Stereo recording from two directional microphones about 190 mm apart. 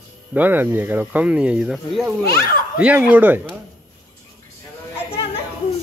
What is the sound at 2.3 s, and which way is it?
Speech, 50° left (ahead or behind).